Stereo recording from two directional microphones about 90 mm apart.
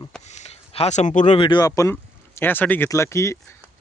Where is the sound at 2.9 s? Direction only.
30° left (ahead or behind).